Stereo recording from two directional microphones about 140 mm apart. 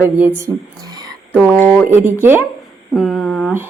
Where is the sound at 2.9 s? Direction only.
5° left (ahead or behind).